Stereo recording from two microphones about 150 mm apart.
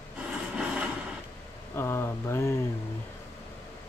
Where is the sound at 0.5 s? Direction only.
10° right (ahead or behind).